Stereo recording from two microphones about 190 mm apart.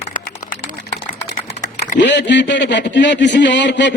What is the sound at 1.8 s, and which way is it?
Speech, 65° left (ahead or behind).